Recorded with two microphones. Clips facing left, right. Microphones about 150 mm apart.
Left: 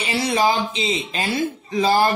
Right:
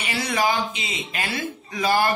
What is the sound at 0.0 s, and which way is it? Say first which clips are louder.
Speech: left 4 dB; 30° left (ahead or behind).